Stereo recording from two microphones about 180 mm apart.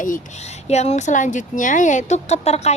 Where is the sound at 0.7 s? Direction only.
40° left (ahead or behind).